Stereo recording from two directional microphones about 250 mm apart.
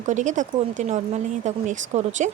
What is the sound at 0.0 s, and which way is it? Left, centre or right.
Speech, right.